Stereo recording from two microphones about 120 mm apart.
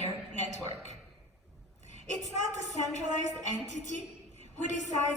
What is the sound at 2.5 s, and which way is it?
A woman's voice, 75° left (ahead or behind).